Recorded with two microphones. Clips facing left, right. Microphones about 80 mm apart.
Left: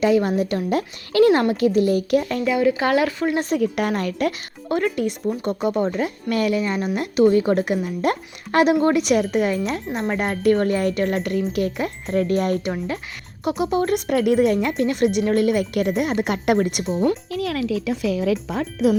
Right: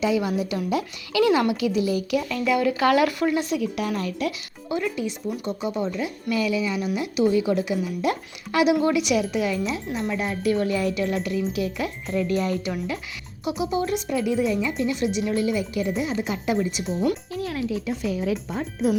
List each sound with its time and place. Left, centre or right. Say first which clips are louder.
0.0 s speech: left 5 dB; left
2.4 s speech: left 2 dB; left
3.2 s speech: left 3 dB; left
11.8 s speech: left 4 dB; left
17.3 s speech: left 4 dB; left